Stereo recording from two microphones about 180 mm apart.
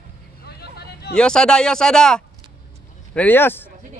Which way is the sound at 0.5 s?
65° left (ahead or behind).